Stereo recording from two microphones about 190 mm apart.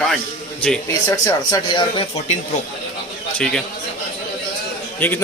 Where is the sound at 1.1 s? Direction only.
20° left (ahead or behind).